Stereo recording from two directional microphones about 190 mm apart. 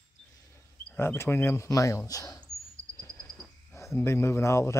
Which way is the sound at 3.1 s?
5° left (ahead or behind).